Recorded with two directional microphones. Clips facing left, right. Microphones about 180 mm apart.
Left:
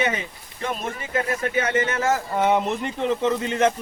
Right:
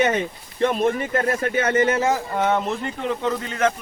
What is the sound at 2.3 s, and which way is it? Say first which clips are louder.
Speech: left 1 dB; 10° left (ahead or behind).